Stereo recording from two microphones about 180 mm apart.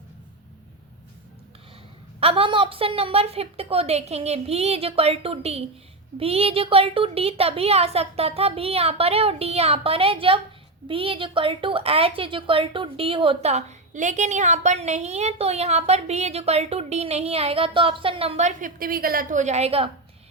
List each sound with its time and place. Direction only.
2.2 s a woman's voice: 30° right (ahead or behind)